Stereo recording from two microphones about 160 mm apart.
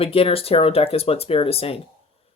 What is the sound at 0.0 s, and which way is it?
Speech, 35° left (ahead or behind).